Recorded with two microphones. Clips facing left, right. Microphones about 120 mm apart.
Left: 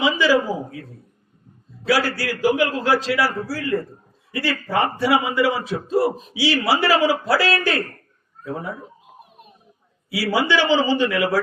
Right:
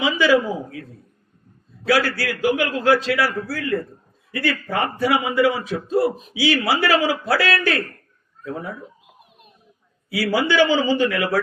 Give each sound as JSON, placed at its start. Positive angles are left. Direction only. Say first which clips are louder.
{"t": 0.1, "sound": "a man's voice", "louder": "right 1 dB", "side_deg": 35}
{"t": 1.9, "sound": "a man's voice", "louder": "right 1 dB", "side_deg": 25}
{"t": 10.1, "sound": "a man's voice", "louder": "even", "side_deg": 25}